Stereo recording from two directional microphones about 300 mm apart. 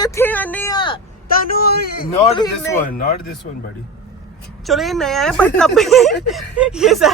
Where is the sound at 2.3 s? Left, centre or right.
Centre.